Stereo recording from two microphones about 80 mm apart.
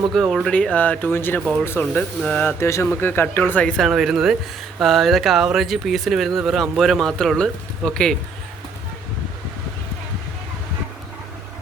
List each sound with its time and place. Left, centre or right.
0.1 s speech: centre; by 1.4 s left
1.4 s speech: centre
1.8 s speech: centre
2.5 s speech: left
3.6 s speech: centre
3.8 s speech: centre